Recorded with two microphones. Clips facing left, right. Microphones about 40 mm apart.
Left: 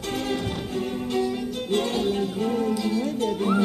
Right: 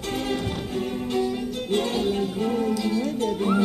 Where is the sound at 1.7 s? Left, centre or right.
Centre.